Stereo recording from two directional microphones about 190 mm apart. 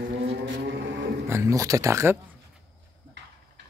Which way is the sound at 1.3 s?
15° right (ahead or behind).